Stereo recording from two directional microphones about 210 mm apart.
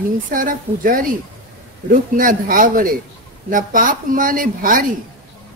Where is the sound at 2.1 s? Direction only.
40° right (ahead or behind).